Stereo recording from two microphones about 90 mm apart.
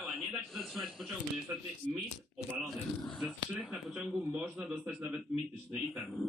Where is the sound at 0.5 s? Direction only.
Centre (ahead or behind).